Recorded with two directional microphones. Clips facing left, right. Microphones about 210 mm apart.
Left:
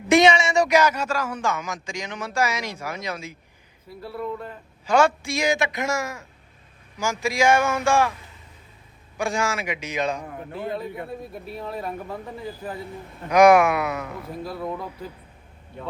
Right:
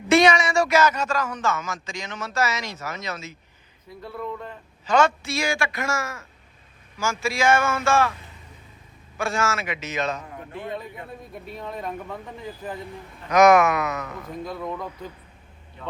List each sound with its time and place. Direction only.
0.1 s a man's voice: 25° left (ahead or behind)
9.1 s a man's voice: 15° left (ahead or behind)
13.3 s a man's voice: 10° left (ahead or behind)